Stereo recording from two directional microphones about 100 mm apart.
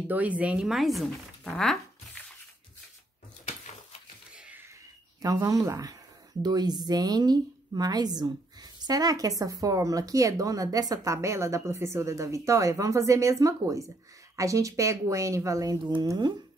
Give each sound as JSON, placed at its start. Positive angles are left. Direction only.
{"t": 0.1, "sound": "speech", "side_deg": -15}
{"t": 4.3, "sound": "a sound", "side_deg": -10}
{"t": 5.2, "sound": "a woman's voice", "side_deg": -35}
{"t": 15.8, "sound": "speech", "side_deg": -50}